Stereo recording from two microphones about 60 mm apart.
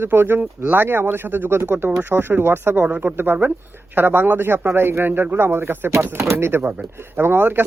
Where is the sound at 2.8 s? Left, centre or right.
Right.